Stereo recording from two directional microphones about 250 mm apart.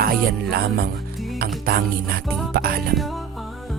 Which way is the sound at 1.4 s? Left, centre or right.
Right.